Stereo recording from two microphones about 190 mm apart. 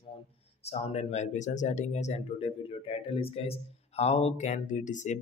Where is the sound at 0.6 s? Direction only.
35° left (ahead or behind).